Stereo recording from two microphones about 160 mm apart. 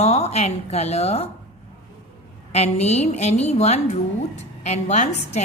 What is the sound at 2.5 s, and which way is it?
A woman's voice, 40° left (ahead or behind).